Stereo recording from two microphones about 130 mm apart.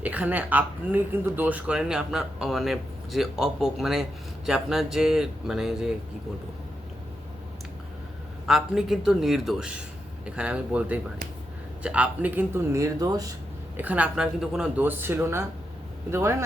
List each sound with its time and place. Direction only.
0.0 s speech: 10° right (ahead or behind)
8.4 s speech: 5° right (ahead or behind)
12.7 s speech: 25° right (ahead or behind)
13.7 s speech: 10° right (ahead or behind)